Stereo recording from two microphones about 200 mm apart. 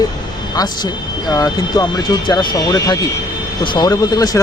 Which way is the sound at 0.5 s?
20° left (ahead or behind).